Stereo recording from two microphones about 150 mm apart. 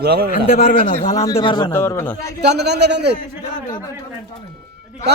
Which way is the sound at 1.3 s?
35° left (ahead or behind).